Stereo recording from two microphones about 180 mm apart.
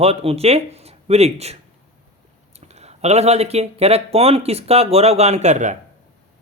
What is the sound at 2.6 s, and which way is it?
Speech, 35° right (ahead or behind).